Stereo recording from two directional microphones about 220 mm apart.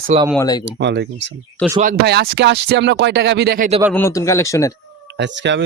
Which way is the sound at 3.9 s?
10° left (ahead or behind).